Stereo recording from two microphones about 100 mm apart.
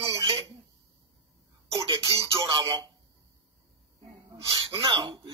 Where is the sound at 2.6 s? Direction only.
40° right (ahead or behind).